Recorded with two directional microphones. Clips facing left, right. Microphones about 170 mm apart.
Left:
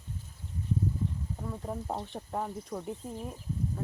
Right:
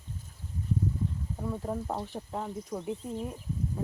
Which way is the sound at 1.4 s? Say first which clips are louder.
Right 5 dB; 5° right (ahead or behind).